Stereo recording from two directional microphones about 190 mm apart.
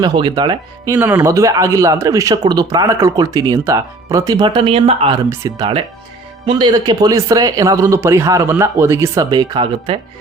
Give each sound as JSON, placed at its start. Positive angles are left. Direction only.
{"t": 0.0, "sound": "speech", "side_deg": -25}
{"t": 0.9, "sound": "speech", "side_deg": -10}
{"t": 5.3, "sound": "speech", "side_deg": -15}
{"t": 6.4, "sound": "speech", "side_deg": -25}